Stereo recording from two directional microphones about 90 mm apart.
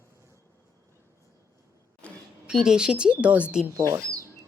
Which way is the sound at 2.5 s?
5° right (ahead or behind).